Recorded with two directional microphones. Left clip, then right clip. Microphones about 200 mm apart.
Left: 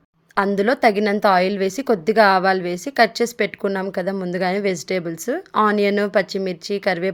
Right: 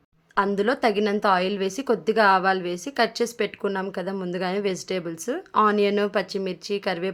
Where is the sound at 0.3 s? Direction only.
15° left (ahead or behind).